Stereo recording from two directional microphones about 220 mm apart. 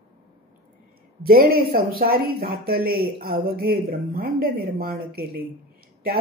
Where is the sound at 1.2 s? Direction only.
45° right (ahead or behind).